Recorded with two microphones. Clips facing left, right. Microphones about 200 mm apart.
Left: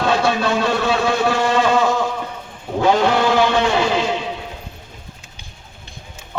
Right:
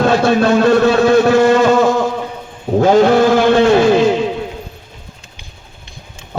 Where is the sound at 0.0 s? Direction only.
50° right (ahead or behind).